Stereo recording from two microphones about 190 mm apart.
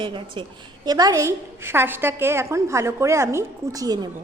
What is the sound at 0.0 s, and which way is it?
A woman's voice, 25° right (ahead or behind).